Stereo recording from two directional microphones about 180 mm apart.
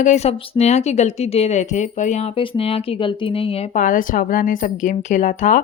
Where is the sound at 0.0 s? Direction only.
40° left (ahead or behind).